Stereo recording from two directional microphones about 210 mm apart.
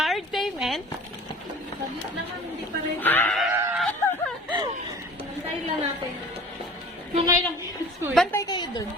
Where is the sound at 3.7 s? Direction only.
Centre (ahead or behind).